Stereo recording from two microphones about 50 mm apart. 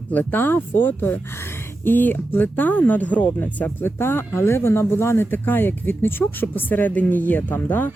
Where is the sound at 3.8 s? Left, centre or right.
Left.